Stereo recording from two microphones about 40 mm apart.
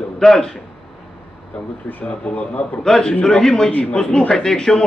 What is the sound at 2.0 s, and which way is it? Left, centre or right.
Speech, left.